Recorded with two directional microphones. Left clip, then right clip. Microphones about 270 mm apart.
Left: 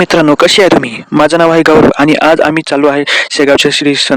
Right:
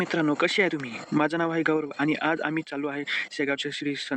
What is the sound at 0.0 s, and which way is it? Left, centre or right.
Speech, left.